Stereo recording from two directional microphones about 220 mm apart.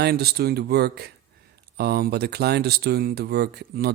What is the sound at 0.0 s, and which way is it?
Speech, 45° right (ahead or behind).